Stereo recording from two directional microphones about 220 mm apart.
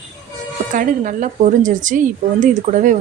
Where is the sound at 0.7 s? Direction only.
35° right (ahead or behind).